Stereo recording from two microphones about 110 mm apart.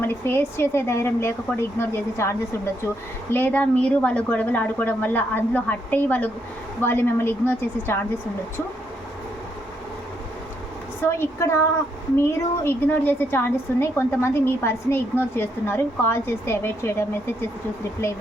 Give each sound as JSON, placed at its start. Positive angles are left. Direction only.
{"t": 0.0, "sound": "a woman's voice", "side_deg": 20}
{"t": 3.3, "sound": "a woman's voice", "side_deg": 15}
{"t": 11.0, "sound": "a woman's voice", "side_deg": 25}